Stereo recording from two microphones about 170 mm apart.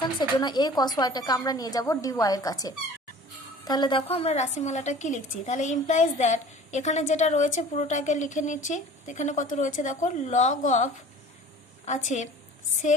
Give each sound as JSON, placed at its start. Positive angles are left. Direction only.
{"t": 0.0, "sound": "a woman's voice", "side_deg": 25}